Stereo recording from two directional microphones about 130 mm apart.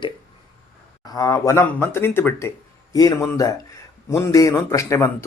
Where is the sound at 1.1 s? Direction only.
25° left (ahead or behind).